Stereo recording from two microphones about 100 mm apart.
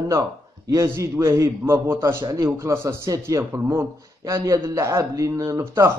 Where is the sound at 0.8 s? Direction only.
25° right (ahead or behind).